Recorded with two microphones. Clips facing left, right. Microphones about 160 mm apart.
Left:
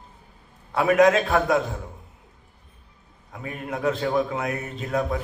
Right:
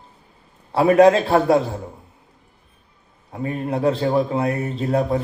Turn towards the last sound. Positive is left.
turn(degrees=-30)  # may be behind; listen again after turning